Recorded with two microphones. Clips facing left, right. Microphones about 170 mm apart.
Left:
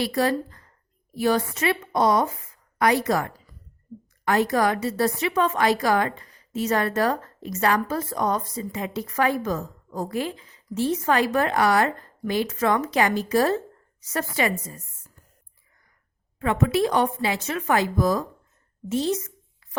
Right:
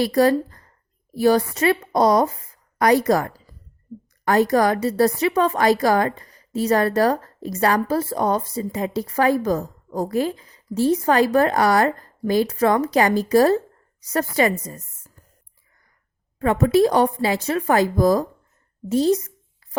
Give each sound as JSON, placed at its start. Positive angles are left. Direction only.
{"t": 0.0, "sound": "a woman's voice", "side_deg": -40}
{"t": 16.4, "sound": "a woman's voice", "side_deg": -40}
{"t": 18.9, "sound": "a sound", "side_deg": -35}